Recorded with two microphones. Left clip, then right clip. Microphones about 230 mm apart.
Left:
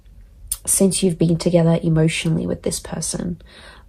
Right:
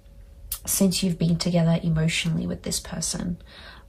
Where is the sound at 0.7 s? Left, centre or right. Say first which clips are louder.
Left 7 dB; left.